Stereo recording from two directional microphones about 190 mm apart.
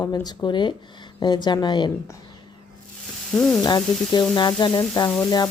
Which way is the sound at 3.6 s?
20° left (ahead or behind).